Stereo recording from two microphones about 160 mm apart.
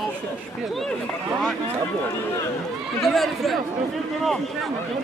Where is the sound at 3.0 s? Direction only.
Centre (ahead or behind).